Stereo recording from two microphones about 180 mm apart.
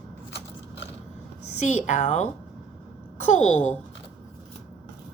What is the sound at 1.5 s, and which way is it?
A woman's voice, 40° left (ahead or behind).